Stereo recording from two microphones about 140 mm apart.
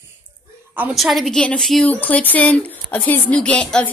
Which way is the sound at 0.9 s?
Centre (ahead or behind).